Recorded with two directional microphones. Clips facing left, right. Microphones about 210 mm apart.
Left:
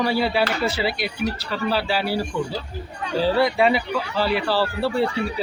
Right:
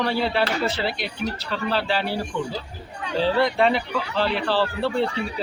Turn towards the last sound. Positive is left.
turn(degrees=5)  # may be behind; listen again after turning